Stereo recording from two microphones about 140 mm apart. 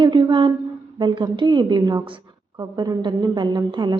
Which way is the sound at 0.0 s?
30° right (ahead or behind).